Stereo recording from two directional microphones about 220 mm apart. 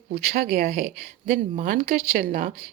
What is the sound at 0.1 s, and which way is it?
Speech, 45° right (ahead or behind).